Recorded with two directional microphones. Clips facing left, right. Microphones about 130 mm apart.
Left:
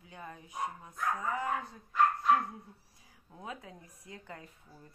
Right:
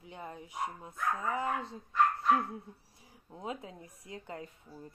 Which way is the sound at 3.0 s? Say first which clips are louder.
Right 4 dB; 25° right (ahead or behind).